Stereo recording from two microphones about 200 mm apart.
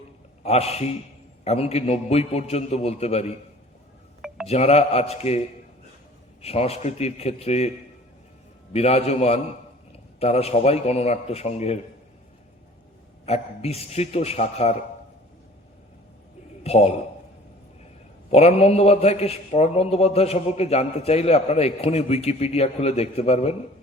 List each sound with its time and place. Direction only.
0.4 s a man's voice: 30° left (ahead or behind)
4.4 s a man's voice: 30° left (ahead or behind)
6.4 s a man's voice: 30° left (ahead or behind)
8.7 s a man's voice: 30° left (ahead or behind)
13.2 s a man's voice: 30° left (ahead or behind)
16.6 s a man's voice: 30° left (ahead or behind)
18.3 s a man's voice: 30° left (ahead or behind)